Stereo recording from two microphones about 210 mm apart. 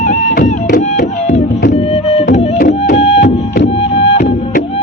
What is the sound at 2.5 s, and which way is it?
Music, 45° left (ahead or behind).